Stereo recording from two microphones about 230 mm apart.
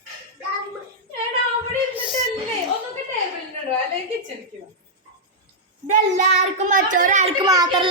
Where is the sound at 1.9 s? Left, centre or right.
Centre.